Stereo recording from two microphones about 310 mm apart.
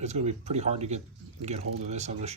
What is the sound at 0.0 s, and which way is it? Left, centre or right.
Speech, right.